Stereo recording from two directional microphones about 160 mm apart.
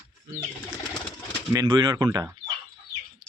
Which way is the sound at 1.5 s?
25° right (ahead or behind).